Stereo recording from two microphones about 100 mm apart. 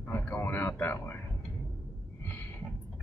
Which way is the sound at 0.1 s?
20° left (ahead or behind).